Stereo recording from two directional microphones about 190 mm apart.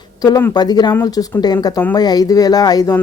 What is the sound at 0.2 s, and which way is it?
Speech, 20° left (ahead or behind).